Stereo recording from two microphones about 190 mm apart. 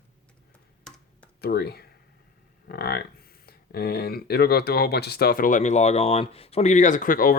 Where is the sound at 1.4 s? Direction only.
55° left (ahead or behind).